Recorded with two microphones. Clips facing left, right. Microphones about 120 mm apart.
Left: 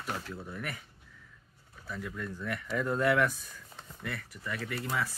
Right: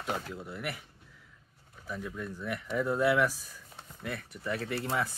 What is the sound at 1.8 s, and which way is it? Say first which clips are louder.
Speech: right 1 dB; 15° right (ahead or behind).